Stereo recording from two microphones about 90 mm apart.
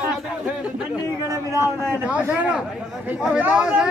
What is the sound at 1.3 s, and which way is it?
Speech, 35° right (ahead or behind).